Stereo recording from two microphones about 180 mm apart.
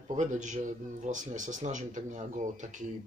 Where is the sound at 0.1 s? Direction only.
45° right (ahead or behind).